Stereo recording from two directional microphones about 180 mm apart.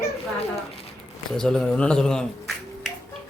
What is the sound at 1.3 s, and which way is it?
Speech, 5° left (ahead or behind).